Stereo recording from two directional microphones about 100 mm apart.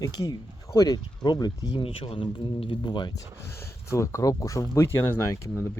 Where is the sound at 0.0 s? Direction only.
40° left (ahead or behind).